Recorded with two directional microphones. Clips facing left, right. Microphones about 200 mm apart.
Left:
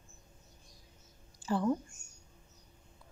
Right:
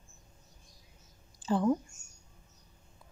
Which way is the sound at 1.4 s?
20° right (ahead or behind).